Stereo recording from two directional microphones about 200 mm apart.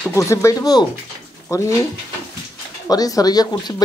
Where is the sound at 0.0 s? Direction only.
15° left (ahead or behind).